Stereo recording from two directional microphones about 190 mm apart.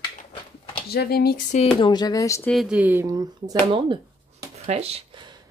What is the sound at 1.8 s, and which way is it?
Speech, 20° left (ahead or behind).